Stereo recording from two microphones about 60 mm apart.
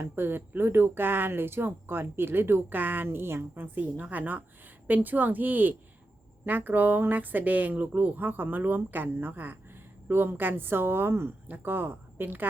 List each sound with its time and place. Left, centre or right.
0.0 s speech: right
3.8 s a woman's voice: right